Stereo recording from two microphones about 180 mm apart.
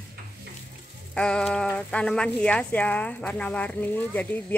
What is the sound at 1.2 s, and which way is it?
Speech, 5° left (ahead or behind).